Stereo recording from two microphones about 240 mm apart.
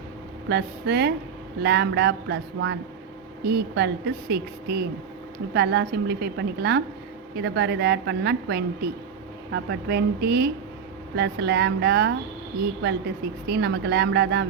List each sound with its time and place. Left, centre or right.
0.4 s a woman's voice: right
13.5 s a woman's voice: right